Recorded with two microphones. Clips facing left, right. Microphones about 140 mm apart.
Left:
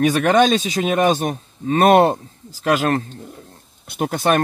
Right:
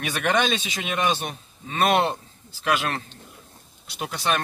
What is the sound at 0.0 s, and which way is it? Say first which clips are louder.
Speech: left 9 dB; 40° left (ahead or behind).